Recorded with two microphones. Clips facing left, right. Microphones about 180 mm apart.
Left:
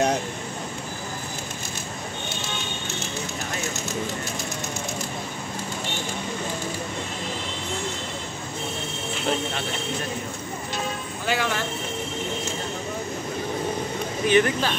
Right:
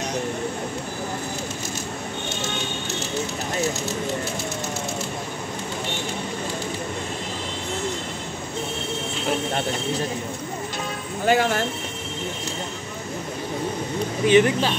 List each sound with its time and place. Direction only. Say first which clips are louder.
11.2 s speech: right 6 dB; 45° right (ahead or behind)
14.2 s speech: right 3 dB; 20° right (ahead or behind)